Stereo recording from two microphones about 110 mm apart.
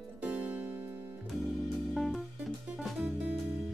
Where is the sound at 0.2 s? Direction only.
15° right (ahead or behind).